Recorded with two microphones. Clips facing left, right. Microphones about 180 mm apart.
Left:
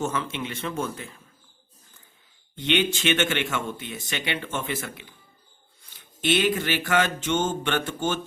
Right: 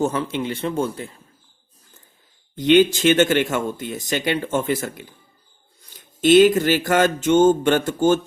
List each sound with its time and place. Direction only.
0.0 s speech: 35° right (ahead or behind)
2.6 s speech: 40° right (ahead or behind)